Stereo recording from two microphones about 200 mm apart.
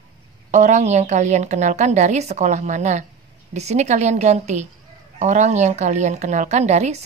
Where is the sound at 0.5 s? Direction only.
35° right (ahead or behind).